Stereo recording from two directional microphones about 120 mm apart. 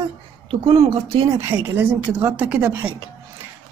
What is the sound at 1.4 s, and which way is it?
A woman's voice, 20° right (ahead or behind).